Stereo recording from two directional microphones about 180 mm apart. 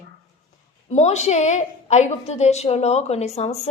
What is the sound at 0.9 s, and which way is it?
A woman's voice, 40° left (ahead or behind).